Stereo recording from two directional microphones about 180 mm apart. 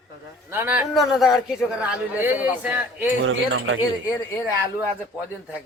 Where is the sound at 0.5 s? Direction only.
10° right (ahead or behind).